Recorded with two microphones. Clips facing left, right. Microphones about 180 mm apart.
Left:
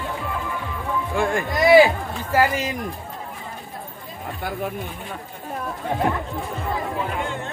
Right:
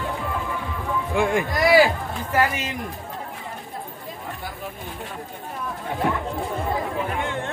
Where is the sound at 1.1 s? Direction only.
15° right (ahead or behind).